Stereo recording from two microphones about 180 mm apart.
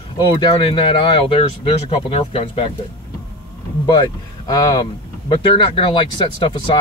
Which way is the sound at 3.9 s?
25° left (ahead or behind).